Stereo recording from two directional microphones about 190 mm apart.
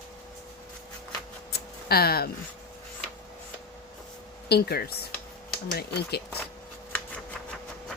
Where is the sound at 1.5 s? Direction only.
55° left (ahead or behind).